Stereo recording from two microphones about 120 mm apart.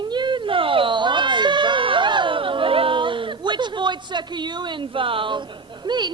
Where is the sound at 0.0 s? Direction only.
40° right (ahead or behind).